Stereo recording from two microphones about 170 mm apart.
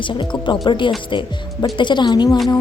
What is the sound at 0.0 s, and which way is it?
Speech, 30° left (ahead or behind).